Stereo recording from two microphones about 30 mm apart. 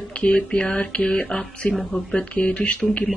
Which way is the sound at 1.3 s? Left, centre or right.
Left.